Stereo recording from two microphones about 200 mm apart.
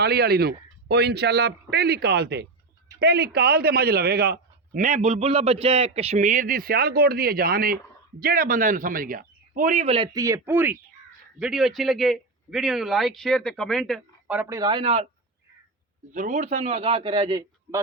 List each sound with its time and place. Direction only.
0.0 s a man's voice: 50° right (ahead or behind); by 10.1 s 30° right (ahead or behind)
10.1 s a man's voice: 15° right (ahead or behind)
14.6 s a man's voice: 25° right (ahead or behind)
16.1 s a man's voice: 40° right (ahead or behind); by 17.7 s 20° right (ahead or behind)